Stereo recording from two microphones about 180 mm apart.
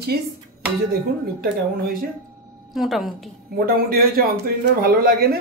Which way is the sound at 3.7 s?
55° right (ahead or behind).